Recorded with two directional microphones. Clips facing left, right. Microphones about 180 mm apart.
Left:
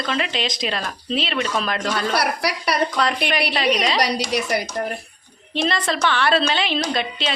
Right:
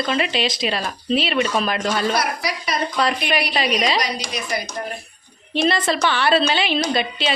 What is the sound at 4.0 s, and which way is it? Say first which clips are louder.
Speech: left 4 dB; 70° left (ahead or behind).